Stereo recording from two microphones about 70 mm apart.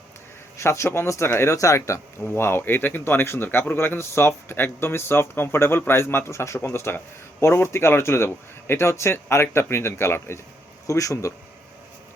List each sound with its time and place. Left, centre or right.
0.5 s speech: left
2.2 s speech: left
10.8 s speech: left